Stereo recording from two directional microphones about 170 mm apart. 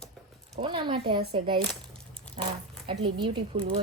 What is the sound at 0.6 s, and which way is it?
Speech, 30° right (ahead or behind).